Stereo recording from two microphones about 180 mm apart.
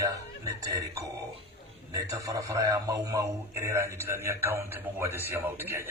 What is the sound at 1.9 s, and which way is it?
A man's voice, 20° right (ahead or behind).